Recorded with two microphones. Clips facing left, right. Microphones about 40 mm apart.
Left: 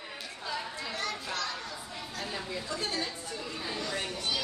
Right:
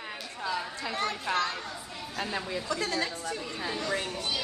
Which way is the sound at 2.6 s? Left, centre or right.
Right.